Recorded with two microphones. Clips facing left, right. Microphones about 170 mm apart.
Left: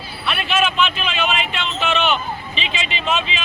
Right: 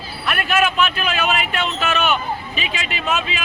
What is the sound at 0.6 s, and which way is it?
Speech, 10° right (ahead or behind).